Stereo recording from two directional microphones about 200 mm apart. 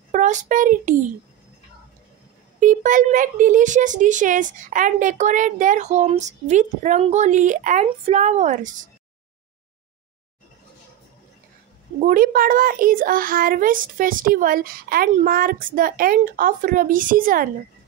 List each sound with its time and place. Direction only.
0.1 s a child's voice: 40° right (ahead or behind)
2.6 s speech: 40° right (ahead or behind)
12.0 s a child's voice: 45° right (ahead or behind)